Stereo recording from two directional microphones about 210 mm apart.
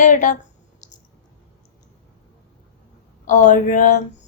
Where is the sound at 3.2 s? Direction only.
35° left (ahead or behind).